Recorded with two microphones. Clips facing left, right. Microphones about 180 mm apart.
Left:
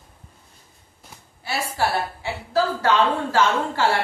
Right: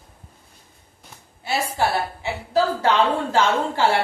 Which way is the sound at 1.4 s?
20° right (ahead or behind).